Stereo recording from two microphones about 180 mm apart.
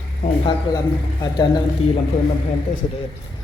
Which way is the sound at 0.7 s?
25° left (ahead or behind).